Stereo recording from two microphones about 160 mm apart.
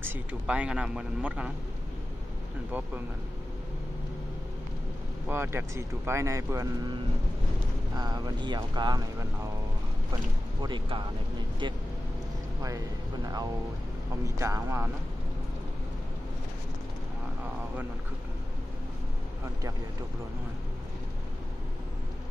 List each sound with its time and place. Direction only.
0.0 s speech: 10° right (ahead or behind)
5.3 s speech: 15° right (ahead or behind)
7.9 s speech: 25° right (ahead or behind)
10.6 s speech: 30° right (ahead or behind)
11.6 s vehicle: 30° right (ahead or behind)
12.6 s speech: 20° right (ahead or behind)